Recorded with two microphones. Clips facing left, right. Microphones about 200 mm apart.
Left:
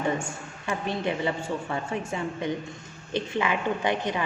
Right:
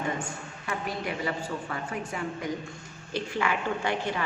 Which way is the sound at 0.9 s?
25° left (ahead or behind).